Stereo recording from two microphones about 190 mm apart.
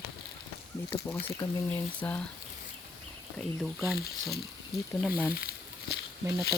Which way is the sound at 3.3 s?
Centre (ahead or behind).